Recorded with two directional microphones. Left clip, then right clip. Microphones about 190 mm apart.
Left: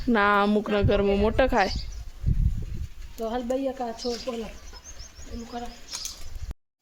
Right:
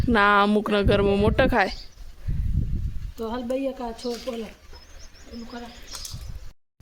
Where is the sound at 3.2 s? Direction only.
25° right (ahead or behind).